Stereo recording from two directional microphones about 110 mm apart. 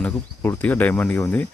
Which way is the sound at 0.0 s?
15° left (ahead or behind).